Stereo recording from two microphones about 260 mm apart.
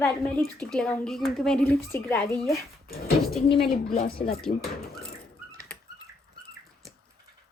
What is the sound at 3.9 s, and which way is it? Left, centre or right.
Speech, left.